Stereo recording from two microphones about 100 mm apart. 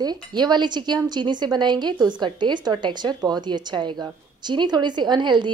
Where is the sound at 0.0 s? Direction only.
45° right (ahead or behind).